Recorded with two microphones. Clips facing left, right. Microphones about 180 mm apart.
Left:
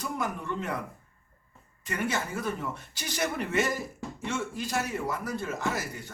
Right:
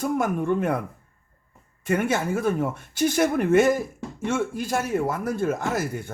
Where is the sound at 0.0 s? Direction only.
50° right (ahead or behind).